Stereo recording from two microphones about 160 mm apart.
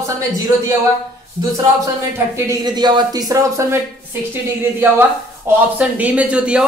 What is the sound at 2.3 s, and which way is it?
Speech, 25° right (ahead or behind).